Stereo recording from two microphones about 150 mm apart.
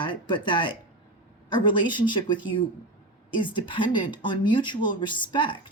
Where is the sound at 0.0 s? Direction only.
35° left (ahead or behind).